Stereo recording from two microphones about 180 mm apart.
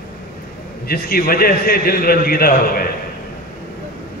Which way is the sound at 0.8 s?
55° left (ahead or behind).